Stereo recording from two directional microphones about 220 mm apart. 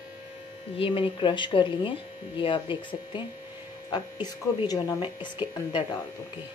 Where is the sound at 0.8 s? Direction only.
25° left (ahead or behind).